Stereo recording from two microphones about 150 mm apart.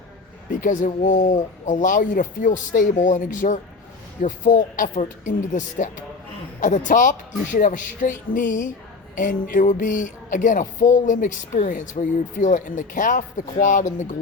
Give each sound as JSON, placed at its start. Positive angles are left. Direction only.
{"t": 0.5, "sound": "speech", "side_deg": 60}